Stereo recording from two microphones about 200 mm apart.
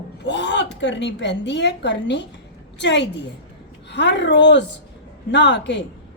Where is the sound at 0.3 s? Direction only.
60° left (ahead or behind).